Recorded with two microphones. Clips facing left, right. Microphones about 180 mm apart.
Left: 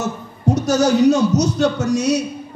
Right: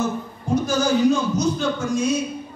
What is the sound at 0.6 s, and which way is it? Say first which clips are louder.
A man's voice: left 4 dB; 75° left (ahead or behind).